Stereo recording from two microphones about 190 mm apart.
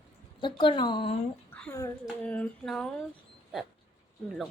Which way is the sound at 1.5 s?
5° left (ahead or behind).